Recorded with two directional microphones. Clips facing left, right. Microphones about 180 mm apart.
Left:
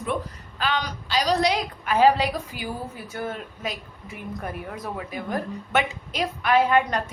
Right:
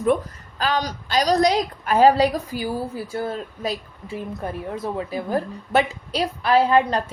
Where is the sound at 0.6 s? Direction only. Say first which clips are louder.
Right 3 dB; 40° right (ahead or behind).